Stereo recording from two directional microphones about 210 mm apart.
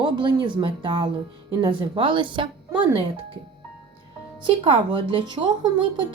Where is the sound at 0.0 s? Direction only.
20° right (ahead or behind).